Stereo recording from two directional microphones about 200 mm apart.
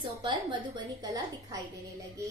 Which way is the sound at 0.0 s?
25° right (ahead or behind).